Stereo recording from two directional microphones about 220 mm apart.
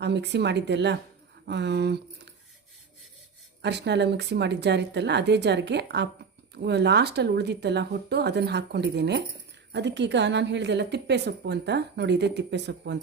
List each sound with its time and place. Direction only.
0.0 s a woman's voice: 50° right (ahead or behind)
3.6 s a woman's voice: 50° right (ahead or behind)